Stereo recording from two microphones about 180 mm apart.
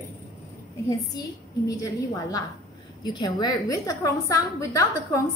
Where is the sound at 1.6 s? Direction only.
20° left (ahead or behind).